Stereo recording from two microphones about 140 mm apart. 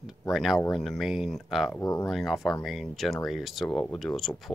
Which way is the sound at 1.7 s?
20° left (ahead or behind).